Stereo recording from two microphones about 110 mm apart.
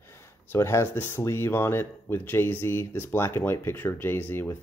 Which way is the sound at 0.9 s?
20° left (ahead or behind).